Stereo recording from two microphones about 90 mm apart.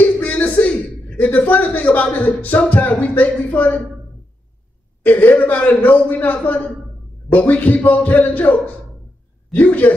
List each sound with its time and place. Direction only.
0.0 s a man's voice: 20° left (ahead or behind)
5.0 s speech: 20° left (ahead or behind)